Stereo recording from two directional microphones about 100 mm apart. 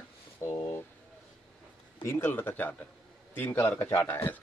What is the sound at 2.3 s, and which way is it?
Speech, 15° left (ahead or behind).